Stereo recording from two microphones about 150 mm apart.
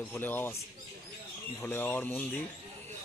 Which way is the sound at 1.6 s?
15° left (ahead or behind).